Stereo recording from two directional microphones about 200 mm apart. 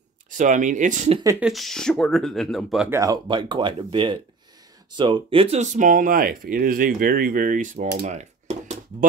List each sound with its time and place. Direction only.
0.3 s speech: 40° right (ahead or behind)
1.4 s speech: centre (ahead or behind)
2.9 s speech: 15° right (ahead or behind); by 7.9 s 40° right (ahead or behind)
8.1 s dishes: 35° right (ahead or behind)